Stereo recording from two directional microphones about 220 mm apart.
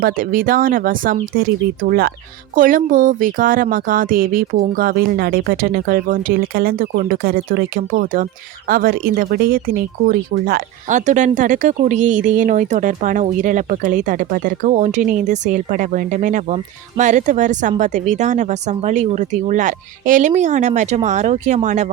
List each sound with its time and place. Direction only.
0.0 s speech: 40° right (ahead or behind)